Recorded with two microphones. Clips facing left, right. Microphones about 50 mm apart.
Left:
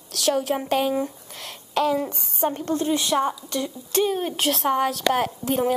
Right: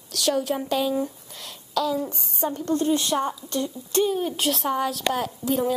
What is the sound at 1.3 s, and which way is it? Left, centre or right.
A woman's voice, left.